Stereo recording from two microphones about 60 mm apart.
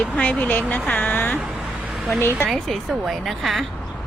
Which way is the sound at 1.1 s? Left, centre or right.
Left.